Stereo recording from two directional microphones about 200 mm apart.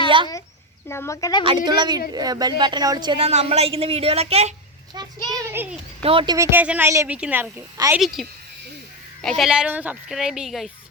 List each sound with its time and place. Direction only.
0.9 s speech: 15° left (ahead or behind)
1.5 s speech: 20° right (ahead or behind)
4.9 s speech: 15° right (ahead or behind)
6.0 s speech: 25° right (ahead or behind); by 8.0 s 10° right (ahead or behind)
8.0 s a woman's voice: centre (ahead or behind)